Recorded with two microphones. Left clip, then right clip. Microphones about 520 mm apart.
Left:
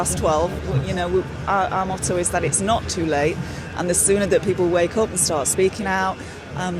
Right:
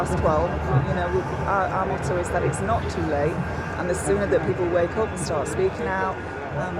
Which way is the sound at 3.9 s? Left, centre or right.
Left.